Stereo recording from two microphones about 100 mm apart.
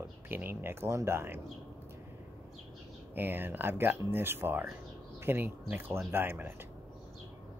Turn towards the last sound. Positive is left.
turn(degrees=-20)  # may be behind; listen again after turning